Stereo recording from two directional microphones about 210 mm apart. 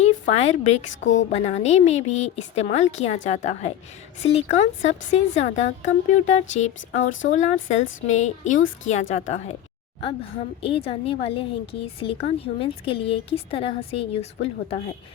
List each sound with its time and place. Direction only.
0.0 s a woman's voice: 30° left (ahead or behind)
10.6 s a woman's voice: 25° left (ahead or behind)